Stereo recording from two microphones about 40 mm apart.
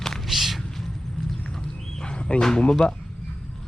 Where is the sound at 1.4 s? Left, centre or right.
Centre.